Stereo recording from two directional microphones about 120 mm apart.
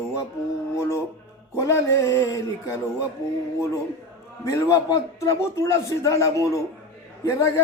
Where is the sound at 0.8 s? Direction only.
20° left (ahead or behind).